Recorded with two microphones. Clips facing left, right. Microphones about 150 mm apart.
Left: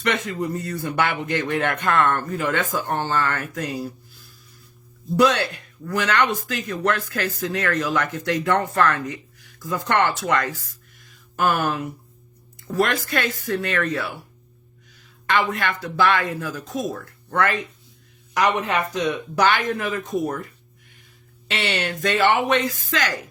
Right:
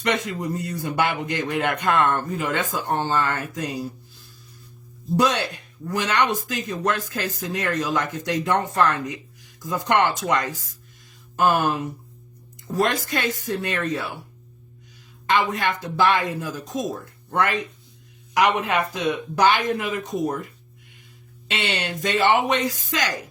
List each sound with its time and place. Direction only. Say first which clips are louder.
0.0 s speech: left 1 dB; 15° right (ahead or behind)
12.7 s speech: left 1 dB; 20° right (ahead or behind)
15.3 s speech: right 1 dB; 15° right (ahead or behind)
18.6 s speech: even; 15° right (ahead or behind)
21.5 s speech: left 1 dB; 15° right (ahead or behind)